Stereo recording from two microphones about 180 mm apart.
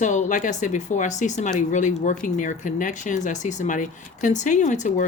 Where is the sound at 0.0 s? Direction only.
40° left (ahead or behind).